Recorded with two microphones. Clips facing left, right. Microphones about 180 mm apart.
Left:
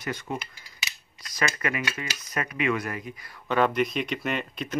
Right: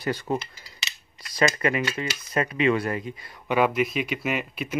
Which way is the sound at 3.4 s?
10° right (ahead or behind).